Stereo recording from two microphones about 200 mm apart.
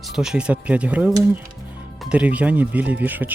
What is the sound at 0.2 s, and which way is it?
Speech, 5° right (ahead or behind).